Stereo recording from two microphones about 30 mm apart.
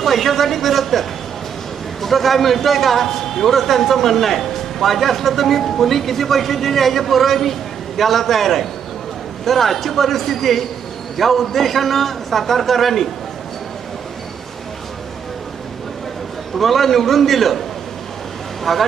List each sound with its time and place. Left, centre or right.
0.0 s a man's voice: centre
16.5 s a man's voice: centre